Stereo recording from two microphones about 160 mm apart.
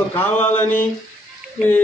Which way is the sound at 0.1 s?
10° left (ahead or behind).